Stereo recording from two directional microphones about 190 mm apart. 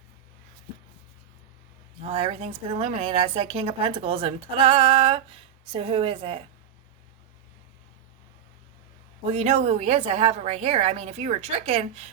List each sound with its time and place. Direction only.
2.0 s a woman's voice: 30° right (ahead or behind)
9.2 s a woman's voice: 35° right (ahead or behind)